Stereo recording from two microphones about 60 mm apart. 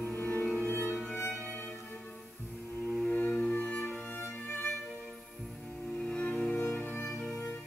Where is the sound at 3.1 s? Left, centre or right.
Left.